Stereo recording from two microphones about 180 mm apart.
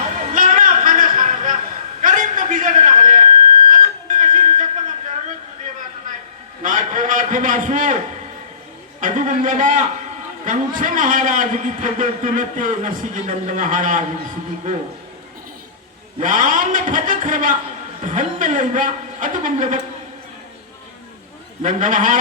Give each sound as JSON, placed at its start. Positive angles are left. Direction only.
{"t": 0.2, "sound": "a sound", "side_deg": -45}
{"t": 3.7, "sound": "music", "side_deg": -45}
{"t": 6.6, "sound": "a sound", "side_deg": -45}
{"t": 9.0, "sound": "a man's voice", "side_deg": -45}
{"t": 16.2, "sound": "a man's voice", "side_deg": -45}
{"t": 21.6, "sound": "a man's voice", "side_deg": -45}